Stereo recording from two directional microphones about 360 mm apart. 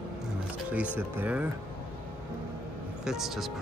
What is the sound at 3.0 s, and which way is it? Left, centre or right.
Speech, centre.